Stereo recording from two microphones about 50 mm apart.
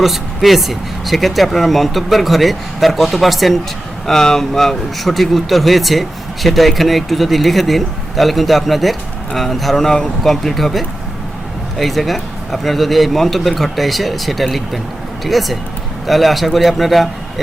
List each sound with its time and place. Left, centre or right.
0.0 s speech: centre